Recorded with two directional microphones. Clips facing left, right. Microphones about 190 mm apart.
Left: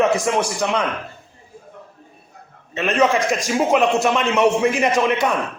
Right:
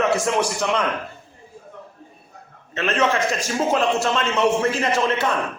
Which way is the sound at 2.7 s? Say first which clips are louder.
Left 3 dB; 10° left (ahead or behind).